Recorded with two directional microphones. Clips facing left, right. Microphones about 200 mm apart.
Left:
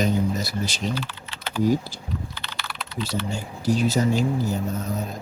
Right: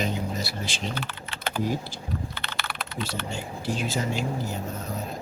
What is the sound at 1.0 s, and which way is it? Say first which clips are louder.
Typing: left 2 dB; 55° right (ahead or behind).